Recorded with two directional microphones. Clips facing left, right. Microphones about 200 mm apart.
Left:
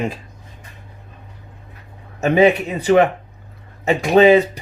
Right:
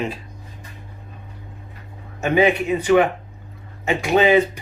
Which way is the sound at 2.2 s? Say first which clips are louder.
Left 3 dB; 40° left (ahead or behind).